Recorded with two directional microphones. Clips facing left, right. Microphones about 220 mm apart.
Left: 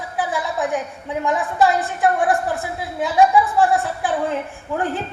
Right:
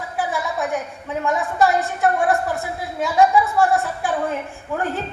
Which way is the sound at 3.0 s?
15° left (ahead or behind).